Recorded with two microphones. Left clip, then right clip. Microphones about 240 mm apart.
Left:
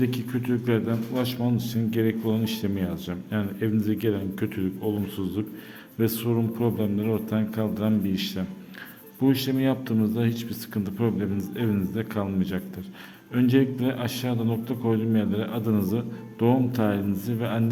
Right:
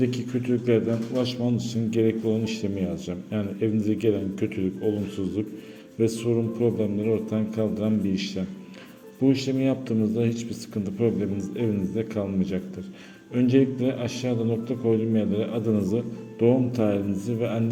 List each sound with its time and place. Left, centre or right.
0.0 s a man's voice: centre